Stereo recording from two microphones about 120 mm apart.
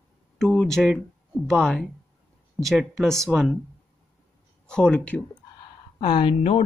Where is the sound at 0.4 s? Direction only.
Centre (ahead or behind).